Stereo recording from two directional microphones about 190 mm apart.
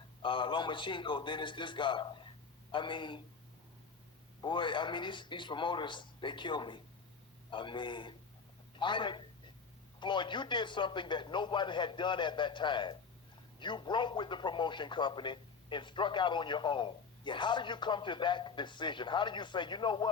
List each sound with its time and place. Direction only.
0.2 s a man's voice: 25° left (ahead or behind)
4.4 s a man's voice: 25° left (ahead or behind)